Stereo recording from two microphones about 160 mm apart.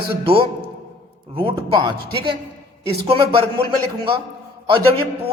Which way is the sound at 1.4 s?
30° right (ahead or behind).